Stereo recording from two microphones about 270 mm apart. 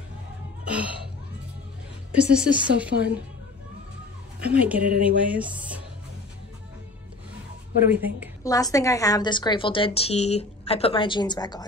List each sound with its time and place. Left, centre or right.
0.7 s a woman's voice: centre
2.1 s a woman's voice: centre
4.6 s a woman's voice: centre
7.9 s a woman's voice: centre
8.5 s a woman's voice: centre